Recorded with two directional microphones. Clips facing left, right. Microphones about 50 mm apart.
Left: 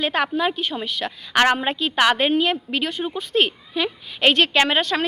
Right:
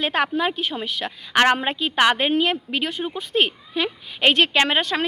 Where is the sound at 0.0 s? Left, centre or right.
Right.